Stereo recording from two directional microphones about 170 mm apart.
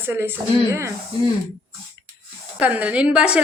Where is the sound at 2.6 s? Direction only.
10° right (ahead or behind).